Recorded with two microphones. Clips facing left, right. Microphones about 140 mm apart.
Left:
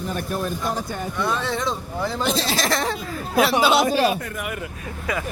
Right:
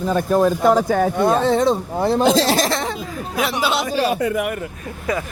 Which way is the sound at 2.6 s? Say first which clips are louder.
Right 1 dB; 25° right (ahead or behind).